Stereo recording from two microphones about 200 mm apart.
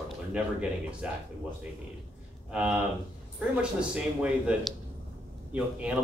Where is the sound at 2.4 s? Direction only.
5° right (ahead or behind).